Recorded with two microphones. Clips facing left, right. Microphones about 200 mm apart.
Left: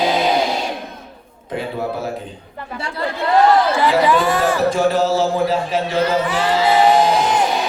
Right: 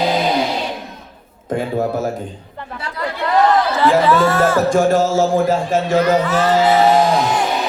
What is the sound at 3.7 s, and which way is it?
Speech, 15° left (ahead or behind).